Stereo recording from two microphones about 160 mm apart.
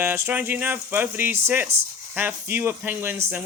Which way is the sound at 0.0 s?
15° right (ahead or behind).